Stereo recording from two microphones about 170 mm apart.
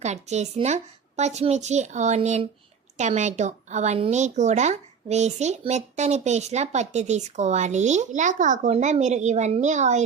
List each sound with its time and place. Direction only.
0.0 s a woman's voice: 40° right (ahead or behind)